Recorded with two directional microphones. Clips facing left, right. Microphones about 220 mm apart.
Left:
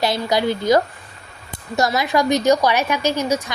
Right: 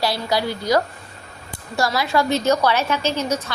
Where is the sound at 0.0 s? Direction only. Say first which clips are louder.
Left 3 dB; 20° left (ahead or behind).